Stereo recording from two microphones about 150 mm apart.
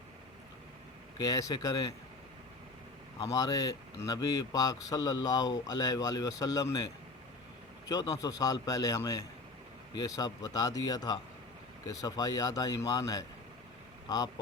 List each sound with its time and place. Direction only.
1.2 s speech: 25° left (ahead or behind)
3.2 s speech: 25° left (ahead or behind)
7.9 s speech: 25° left (ahead or behind)